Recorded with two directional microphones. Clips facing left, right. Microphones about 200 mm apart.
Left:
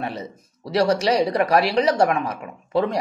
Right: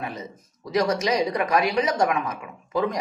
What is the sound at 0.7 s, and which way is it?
Speech, 30° left (ahead or behind).